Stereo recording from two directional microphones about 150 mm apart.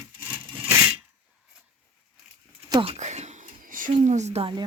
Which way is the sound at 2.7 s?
40° right (ahead or behind).